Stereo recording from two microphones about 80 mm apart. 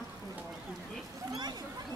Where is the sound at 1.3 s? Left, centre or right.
Right.